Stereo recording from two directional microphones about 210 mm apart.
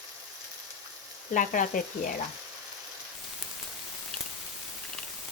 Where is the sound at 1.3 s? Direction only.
40° left (ahead or behind).